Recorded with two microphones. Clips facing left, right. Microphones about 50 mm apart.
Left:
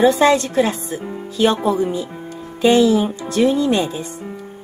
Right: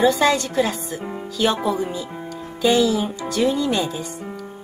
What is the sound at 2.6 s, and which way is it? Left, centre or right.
Speech, left.